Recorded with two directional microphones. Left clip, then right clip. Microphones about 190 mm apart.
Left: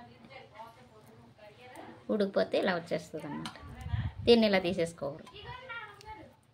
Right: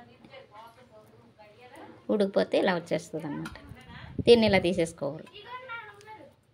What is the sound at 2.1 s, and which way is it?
A woman's voice, 30° right (ahead or behind).